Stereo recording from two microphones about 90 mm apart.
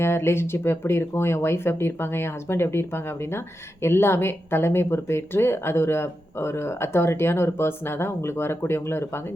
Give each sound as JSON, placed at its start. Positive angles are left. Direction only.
{"t": 0.0, "sound": "speech", "side_deg": 30}